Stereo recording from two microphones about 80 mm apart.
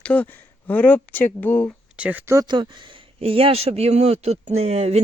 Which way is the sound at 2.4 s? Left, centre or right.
Right.